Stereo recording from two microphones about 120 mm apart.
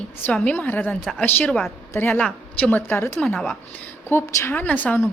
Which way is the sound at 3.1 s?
5° left (ahead or behind).